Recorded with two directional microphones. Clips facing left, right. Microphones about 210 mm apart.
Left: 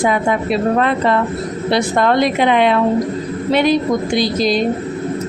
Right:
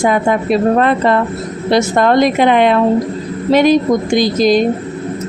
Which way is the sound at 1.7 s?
45° right (ahead or behind).